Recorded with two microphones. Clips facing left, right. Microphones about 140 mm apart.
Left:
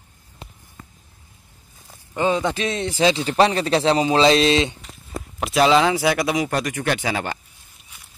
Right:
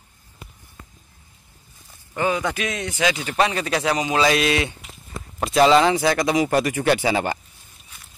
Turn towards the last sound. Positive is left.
turn(degrees=-10)  # may be behind; listen again after turning